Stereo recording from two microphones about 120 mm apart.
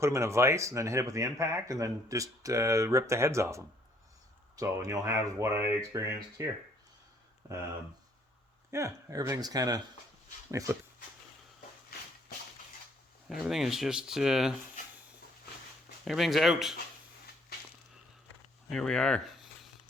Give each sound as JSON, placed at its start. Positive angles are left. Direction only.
{"t": 0.0, "sound": "speech", "side_deg": -25}
{"t": 8.7, "sound": "speech", "side_deg": -25}
{"t": 13.2, "sound": "speech", "side_deg": 0}
{"t": 16.0, "sound": "speech", "side_deg": 0}
{"t": 18.7, "sound": "a sound", "side_deg": 5}